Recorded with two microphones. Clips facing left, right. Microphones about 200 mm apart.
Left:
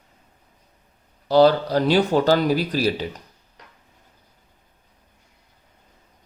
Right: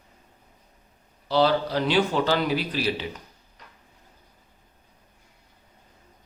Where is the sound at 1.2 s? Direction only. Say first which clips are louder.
Left 6 dB; 45° left (ahead or behind).